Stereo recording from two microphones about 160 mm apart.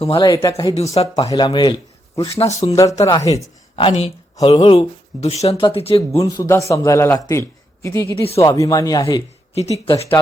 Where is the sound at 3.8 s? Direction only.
35° left (ahead or behind).